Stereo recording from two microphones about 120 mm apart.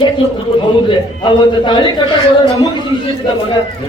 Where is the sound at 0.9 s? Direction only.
40° left (ahead or behind).